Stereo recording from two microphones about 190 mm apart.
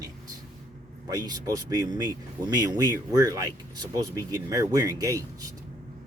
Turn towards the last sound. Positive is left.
turn(degrees=-15)  # may be behind; listen again after turning